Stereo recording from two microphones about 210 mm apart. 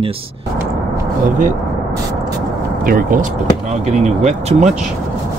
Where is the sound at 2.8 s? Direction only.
40° right (ahead or behind).